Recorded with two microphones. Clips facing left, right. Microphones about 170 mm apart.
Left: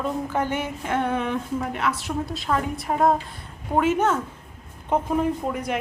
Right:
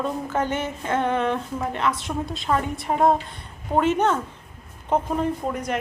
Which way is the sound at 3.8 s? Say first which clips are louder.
Even; 5° left (ahead or behind).